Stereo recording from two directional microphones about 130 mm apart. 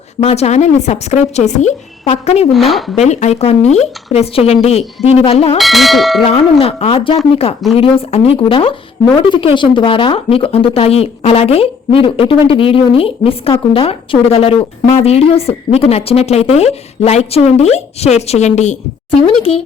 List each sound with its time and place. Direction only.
0.2 s speech: 55° left (ahead or behind)
2.5 s bell: centre (ahead or behind)
2.9 s speech: 60° left (ahead or behind)
5.5 s bell: centre (ahead or behind)
6.2 s speech: 50° left (ahead or behind)
19.4 s speech: 50° left (ahead or behind)